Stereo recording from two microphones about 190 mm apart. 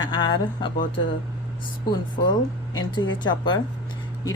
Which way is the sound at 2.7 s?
25° left (ahead or behind).